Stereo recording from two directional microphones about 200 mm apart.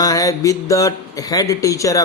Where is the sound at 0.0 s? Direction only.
15° left (ahead or behind).